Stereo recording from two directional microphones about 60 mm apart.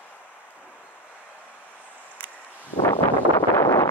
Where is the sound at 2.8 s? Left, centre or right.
Left.